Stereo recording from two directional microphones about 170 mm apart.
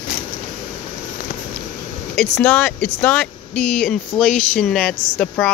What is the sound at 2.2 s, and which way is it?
Speech, 10° left (ahead or behind).